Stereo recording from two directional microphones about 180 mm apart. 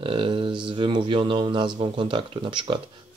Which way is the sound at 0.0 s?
30° right (ahead or behind).